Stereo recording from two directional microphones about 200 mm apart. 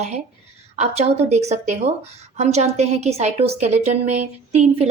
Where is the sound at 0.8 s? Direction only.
30° right (ahead or behind).